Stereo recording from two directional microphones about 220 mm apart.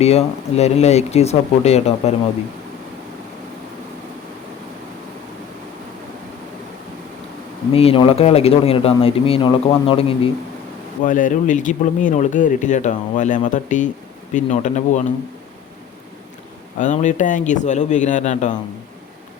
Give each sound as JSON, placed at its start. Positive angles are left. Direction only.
{"t": 0.0, "sound": "speech", "side_deg": 30}
{"t": 7.7, "sound": "speech", "side_deg": 25}
{"t": 11.0, "sound": "speech", "side_deg": 35}
{"t": 16.7, "sound": "speech", "side_deg": 35}